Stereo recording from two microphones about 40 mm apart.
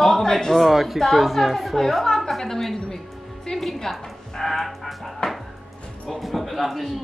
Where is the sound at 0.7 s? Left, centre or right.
Centre.